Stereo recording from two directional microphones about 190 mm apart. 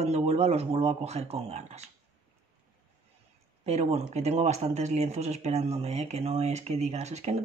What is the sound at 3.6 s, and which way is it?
Speech, 35° right (ahead or behind).